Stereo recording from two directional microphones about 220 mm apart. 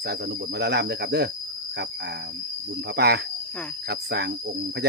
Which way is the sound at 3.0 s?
50° right (ahead or behind).